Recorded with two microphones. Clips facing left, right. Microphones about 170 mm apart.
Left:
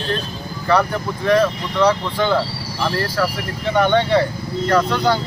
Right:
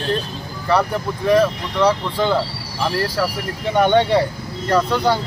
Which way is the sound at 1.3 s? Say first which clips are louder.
Right 1 dB; 5° right (ahead or behind).